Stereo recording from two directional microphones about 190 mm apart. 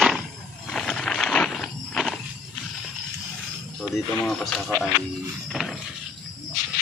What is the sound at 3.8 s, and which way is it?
Speech, centre (ahead or behind).